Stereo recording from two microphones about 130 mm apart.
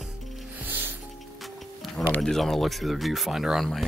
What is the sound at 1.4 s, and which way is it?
Music, centre (ahead or behind).